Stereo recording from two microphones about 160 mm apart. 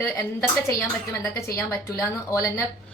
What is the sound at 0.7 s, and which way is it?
Speech, 15° left (ahead or behind).